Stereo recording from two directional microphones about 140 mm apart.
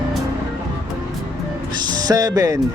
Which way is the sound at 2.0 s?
25° right (ahead or behind).